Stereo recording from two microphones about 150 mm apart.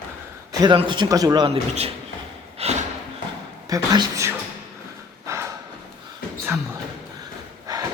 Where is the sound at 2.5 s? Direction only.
45° right (ahead or behind).